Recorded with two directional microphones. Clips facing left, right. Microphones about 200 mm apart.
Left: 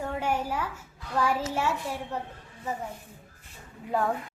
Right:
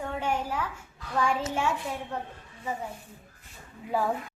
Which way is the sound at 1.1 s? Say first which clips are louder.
Even; 5° left (ahead or behind).